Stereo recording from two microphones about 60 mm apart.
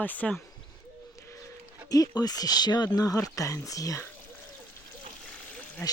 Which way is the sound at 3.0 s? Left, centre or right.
Left.